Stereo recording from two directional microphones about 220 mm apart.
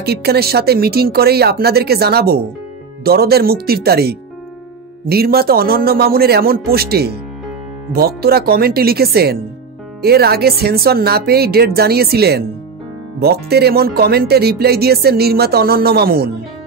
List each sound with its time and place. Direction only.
0.0 s speech: 45° right (ahead or behind)